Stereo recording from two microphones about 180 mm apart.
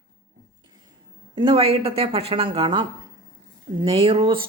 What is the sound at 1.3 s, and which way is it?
A woman's voice, 30° right (ahead or behind).